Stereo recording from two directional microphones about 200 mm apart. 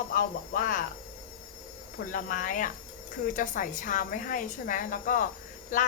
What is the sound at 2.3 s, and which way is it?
A woman's voice, 40° left (ahead or behind).